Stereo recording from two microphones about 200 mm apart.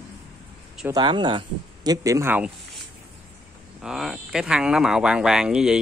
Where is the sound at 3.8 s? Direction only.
5° right (ahead or behind).